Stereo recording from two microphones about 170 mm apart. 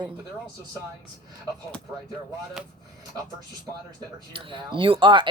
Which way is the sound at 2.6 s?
5° right (ahead or behind).